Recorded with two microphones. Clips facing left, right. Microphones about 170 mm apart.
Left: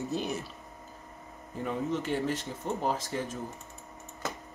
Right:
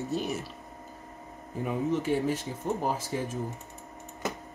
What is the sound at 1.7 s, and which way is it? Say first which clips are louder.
Speech: right 3 dB; 10° right (ahead or behind).